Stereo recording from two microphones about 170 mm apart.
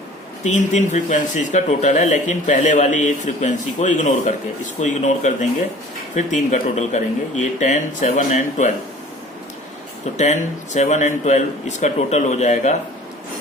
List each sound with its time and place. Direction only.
0.4 s speech: 40° left (ahead or behind)
10.2 s speech: 45° left (ahead or behind)